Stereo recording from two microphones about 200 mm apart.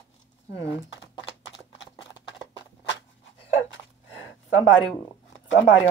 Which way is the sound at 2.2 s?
60° left (ahead or behind).